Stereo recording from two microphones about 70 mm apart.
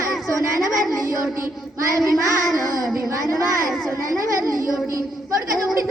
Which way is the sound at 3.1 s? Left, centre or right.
Right.